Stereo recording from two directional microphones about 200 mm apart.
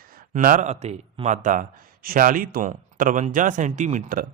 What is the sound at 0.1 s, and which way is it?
A man's voice, 45° right (ahead or behind).